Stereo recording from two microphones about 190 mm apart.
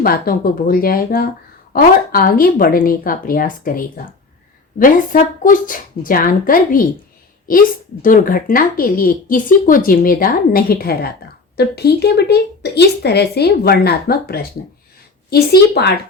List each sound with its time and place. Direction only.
0.0 s speech: 50° left (ahead or behind)